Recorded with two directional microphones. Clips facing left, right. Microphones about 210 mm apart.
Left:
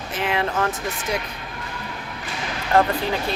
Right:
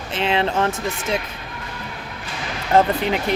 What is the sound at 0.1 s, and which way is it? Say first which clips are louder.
Speech: right 3 dB; 25° right (ahead or behind).